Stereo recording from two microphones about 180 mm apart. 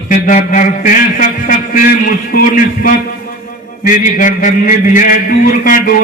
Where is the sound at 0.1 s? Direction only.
45° left (ahead or behind).